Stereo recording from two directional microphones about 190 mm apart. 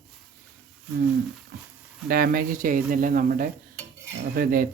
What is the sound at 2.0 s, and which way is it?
Speech, 50° right (ahead or behind).